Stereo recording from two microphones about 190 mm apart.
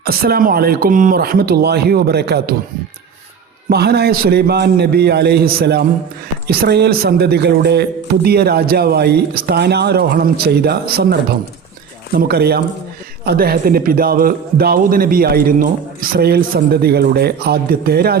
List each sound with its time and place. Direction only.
0.0 s a man's voice: 55° right (ahead or behind)
3.7 s a man's voice: 55° right (ahead or behind)